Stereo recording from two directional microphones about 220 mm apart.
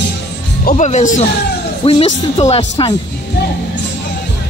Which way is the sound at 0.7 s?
30° left (ahead or behind).